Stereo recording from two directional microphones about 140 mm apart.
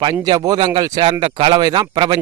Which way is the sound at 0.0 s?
30° right (ahead or behind).